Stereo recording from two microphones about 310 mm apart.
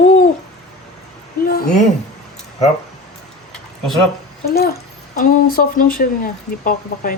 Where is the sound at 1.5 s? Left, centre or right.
Left.